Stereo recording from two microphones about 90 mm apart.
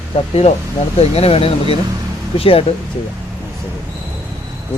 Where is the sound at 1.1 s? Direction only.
90° left.